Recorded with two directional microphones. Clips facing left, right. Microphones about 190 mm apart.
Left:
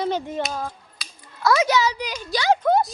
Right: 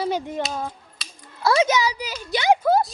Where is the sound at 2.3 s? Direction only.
20° right (ahead or behind).